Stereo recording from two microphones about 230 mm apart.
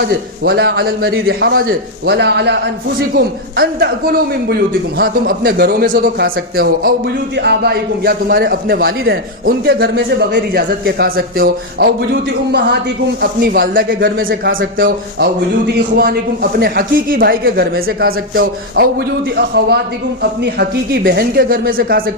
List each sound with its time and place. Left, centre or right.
0.1 s a man's voice: right